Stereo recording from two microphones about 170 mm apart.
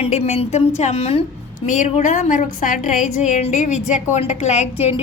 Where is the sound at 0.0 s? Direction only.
40° left (ahead or behind).